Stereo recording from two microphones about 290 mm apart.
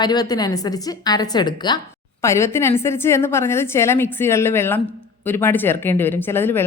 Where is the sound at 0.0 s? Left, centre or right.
Centre.